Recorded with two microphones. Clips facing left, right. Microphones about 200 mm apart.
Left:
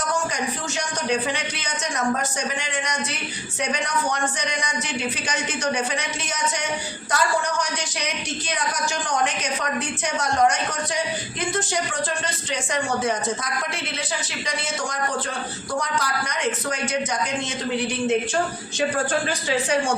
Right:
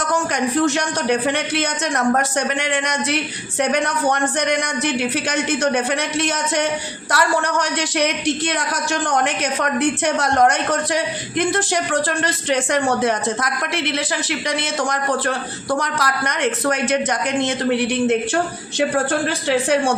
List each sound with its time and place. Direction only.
0.3 s a man's voice: 65° right (ahead or behind)